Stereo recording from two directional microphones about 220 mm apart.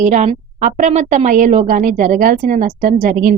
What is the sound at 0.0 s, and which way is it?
A woman's voice, 30° right (ahead or behind).